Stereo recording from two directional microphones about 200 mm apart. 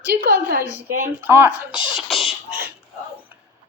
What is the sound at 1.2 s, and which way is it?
Speech, 10° right (ahead or behind).